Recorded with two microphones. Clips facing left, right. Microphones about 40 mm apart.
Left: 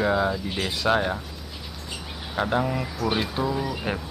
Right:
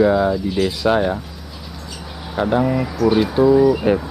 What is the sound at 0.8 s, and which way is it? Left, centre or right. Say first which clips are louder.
Speech: right 4 dB; centre.